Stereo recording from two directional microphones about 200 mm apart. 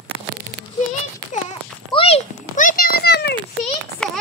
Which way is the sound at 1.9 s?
30° left (ahead or behind).